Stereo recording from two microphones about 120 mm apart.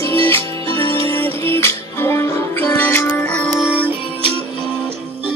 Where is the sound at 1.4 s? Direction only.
20° left (ahead or behind).